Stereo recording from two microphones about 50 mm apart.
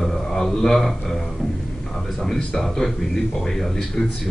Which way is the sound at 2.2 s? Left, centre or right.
Centre.